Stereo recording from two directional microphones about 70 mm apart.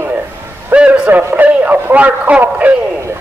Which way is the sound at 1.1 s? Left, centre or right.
Right.